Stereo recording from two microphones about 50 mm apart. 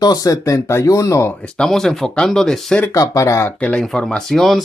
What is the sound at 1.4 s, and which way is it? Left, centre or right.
Speech, centre.